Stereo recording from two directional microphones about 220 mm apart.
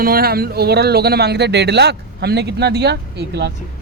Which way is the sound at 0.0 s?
45° right (ahead or behind).